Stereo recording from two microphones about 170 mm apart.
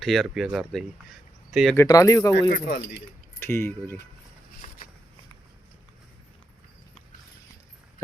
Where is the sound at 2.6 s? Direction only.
80° left.